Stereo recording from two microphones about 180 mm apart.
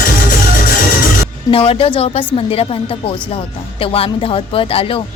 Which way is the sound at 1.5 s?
30° left (ahead or behind).